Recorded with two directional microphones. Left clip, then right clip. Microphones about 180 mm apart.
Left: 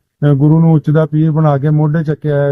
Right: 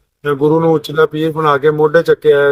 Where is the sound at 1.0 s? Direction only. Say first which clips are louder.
Right 2 dB; 20° left (ahead or behind).